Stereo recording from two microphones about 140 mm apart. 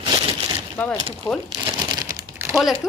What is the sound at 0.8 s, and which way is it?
Speech, 10° left (ahead or behind).